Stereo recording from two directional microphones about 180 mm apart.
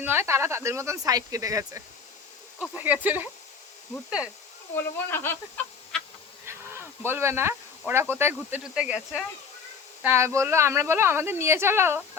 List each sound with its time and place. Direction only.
0.0 s a woman's voice: 15° right (ahead or behind)
4.8 s speech: 10° left (ahead or behind)
5.9 s insect: 5° left (ahead or behind)
6.4 s a sound: 15° right (ahead or behind)
8.4 s a woman's voice: 10° right (ahead or behind)